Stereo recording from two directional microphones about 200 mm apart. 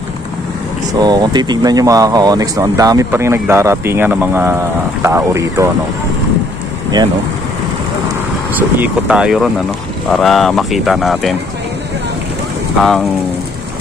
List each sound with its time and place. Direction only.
0.9 s speech: 20° right (ahead or behind)
8.5 s speech: 5° right (ahead or behind)
12.8 s speech: centre (ahead or behind)